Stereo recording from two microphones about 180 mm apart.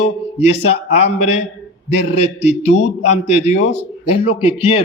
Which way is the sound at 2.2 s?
35° left (ahead or behind).